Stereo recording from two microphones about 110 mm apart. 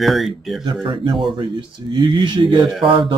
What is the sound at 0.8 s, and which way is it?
Speech, 45° right (ahead or behind).